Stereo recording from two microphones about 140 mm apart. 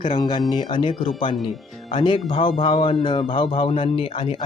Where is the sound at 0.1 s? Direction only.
35° left (ahead or behind).